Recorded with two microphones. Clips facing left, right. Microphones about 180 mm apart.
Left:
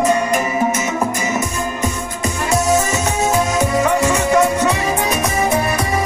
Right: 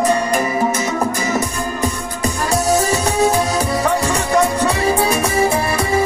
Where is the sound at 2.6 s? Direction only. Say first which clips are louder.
Right 3 dB; 35° right (ahead or behind).